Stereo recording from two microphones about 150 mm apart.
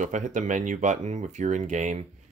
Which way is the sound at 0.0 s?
55° right (ahead or behind).